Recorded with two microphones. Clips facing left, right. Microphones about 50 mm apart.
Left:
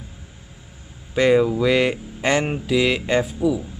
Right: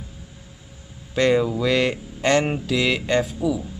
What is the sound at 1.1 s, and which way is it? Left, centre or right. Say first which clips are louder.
Speech: left 2 dB; centre.